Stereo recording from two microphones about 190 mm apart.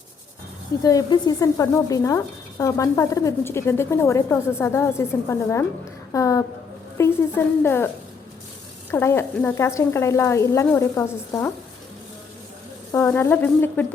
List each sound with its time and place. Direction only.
0.9 s speech: 20° left (ahead or behind)
8.9 s speech: 15° left (ahead or behind)
12.9 s speech: 15° left (ahead or behind)